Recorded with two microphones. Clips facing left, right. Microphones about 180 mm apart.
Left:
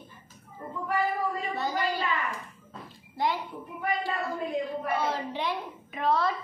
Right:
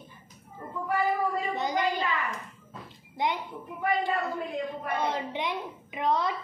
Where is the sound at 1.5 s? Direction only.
20° right (ahead or behind).